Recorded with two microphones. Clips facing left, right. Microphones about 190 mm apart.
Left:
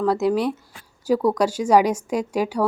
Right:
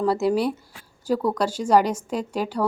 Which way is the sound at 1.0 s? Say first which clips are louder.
Left 4 dB; 10° left (ahead or behind).